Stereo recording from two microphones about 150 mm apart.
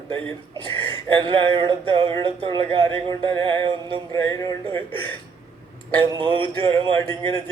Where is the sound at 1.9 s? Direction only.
35° right (ahead or behind).